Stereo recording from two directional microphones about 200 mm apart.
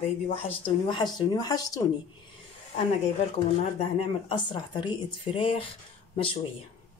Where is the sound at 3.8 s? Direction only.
25° left (ahead or behind).